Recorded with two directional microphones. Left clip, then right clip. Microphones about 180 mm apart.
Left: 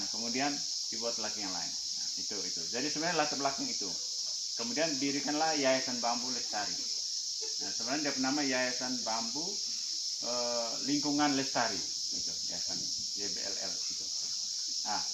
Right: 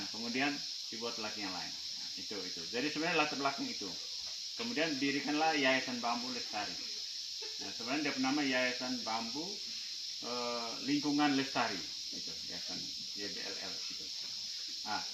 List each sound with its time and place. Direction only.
3.0 s speech: 25° left (ahead or behind)
5.3 s speech: 20° left (ahead or behind)
8.0 s speech: 20° left (ahead or behind)
11.0 s speech: 20° left (ahead or behind)